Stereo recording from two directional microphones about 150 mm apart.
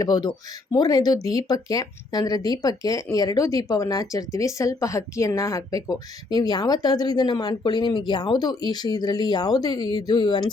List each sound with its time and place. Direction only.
0.0 s speech: 25° left (ahead or behind)